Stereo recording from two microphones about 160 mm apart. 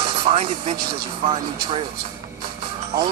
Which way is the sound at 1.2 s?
35° right (ahead or behind).